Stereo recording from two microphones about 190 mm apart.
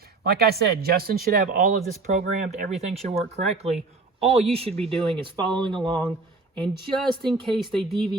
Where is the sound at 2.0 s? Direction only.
40° right (ahead or behind).